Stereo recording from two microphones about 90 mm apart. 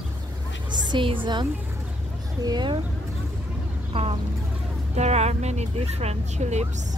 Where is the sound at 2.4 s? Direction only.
45° right (ahead or behind).